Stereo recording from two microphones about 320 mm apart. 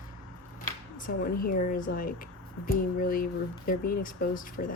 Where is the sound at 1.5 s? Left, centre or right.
Left.